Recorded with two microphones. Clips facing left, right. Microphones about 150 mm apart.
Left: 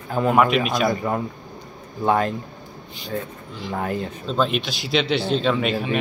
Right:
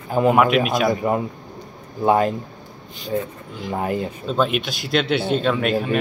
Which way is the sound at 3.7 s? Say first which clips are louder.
Right 2 dB; 10° right (ahead or behind).